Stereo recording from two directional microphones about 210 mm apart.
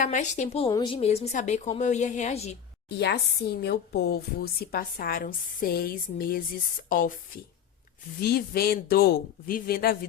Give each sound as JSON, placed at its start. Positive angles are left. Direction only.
{"t": 0.0, "sound": "a woman's voice", "side_deg": 35}
{"t": 2.9, "sound": "a woman's voice", "side_deg": 50}
{"t": 8.2, "sound": "a woman's voice", "side_deg": 45}